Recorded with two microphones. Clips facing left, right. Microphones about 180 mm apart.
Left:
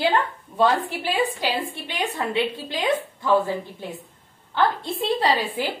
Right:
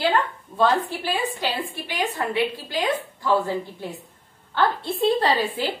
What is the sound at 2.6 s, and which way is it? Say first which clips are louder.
A woman's voice: left 1 dB; 25° left (ahead or behind).